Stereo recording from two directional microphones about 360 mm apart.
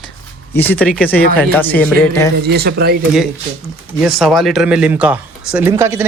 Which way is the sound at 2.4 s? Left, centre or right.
Right.